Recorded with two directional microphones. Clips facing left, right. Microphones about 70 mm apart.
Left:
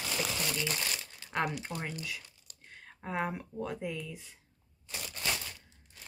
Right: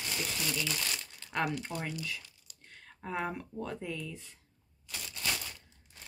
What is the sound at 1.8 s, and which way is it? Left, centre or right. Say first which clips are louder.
Speech: right 1 dB; left.